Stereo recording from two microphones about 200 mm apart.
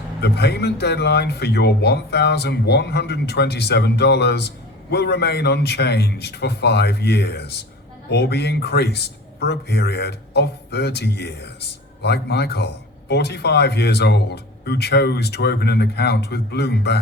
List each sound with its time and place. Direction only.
0.2 s speech: 55° left (ahead or behind)